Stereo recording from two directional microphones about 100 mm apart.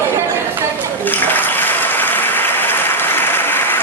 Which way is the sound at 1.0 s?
20° left (ahead or behind).